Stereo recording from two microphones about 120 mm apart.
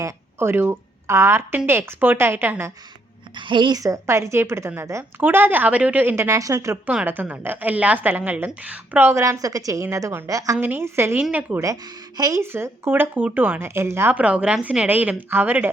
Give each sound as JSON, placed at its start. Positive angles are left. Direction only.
{"t": 0.0, "sound": "a woman's voice", "side_deg": -20}
{"t": 3.5, "sound": "a woman's voice", "side_deg": -40}
{"t": 3.8, "sound": "a woman's voice", "side_deg": -25}
{"t": 6.8, "sound": "a woman's voice", "side_deg": -15}
{"t": 10.6, "sound": "a woman's voice", "side_deg": -15}
{"t": 11.6, "sound": "a woman's voice", "side_deg": -30}